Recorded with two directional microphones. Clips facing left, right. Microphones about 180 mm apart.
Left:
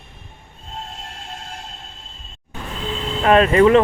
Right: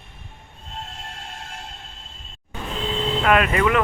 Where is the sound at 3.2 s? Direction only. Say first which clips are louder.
Left 7 dB; 30° left (ahead or behind).